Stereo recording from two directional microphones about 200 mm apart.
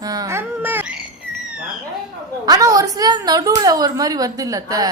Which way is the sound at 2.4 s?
15° right (ahead or behind).